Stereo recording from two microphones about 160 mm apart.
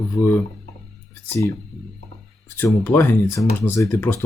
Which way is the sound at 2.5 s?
15° left (ahead or behind).